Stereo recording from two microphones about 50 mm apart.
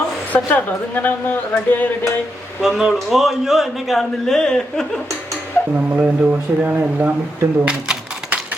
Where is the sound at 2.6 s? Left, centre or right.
Centre.